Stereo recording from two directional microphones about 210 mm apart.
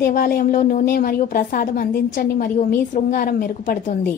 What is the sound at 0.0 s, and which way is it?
A woman's voice, 40° left (ahead or behind).